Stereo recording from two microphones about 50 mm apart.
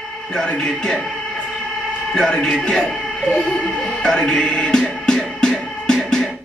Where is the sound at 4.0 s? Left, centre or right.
Centre.